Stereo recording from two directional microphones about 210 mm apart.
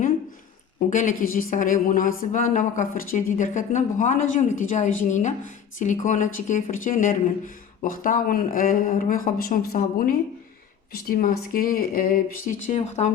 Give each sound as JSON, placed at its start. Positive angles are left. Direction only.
{"t": 0.8, "sound": "speech", "side_deg": 40}